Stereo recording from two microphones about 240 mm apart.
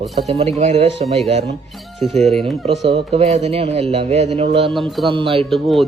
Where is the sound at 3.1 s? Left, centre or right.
Right.